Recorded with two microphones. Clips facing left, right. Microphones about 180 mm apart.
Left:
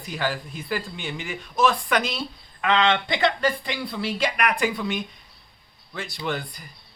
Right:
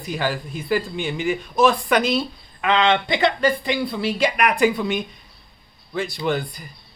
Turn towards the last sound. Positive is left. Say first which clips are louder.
# right 6 dB
turn(degrees=-15)  # may be behind; listen again after turning